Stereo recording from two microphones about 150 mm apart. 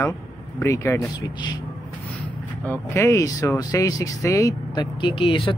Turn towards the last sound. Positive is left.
turn(degrees=35)  # may be behind; listen again after turning